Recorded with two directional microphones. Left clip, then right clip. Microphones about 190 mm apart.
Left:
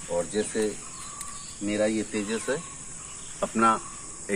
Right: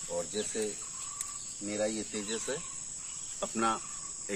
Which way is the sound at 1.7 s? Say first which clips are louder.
Left 8 dB; 10° right (ahead or behind).